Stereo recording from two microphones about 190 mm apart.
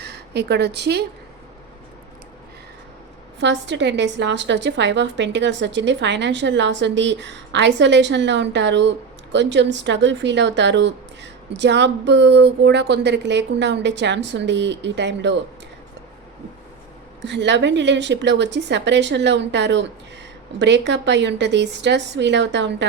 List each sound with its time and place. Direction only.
0.0 s a woman's voice: 60° right (ahead or behind)
3.4 s speech: 65° right (ahead or behind)
17.2 s speech: 65° right (ahead or behind)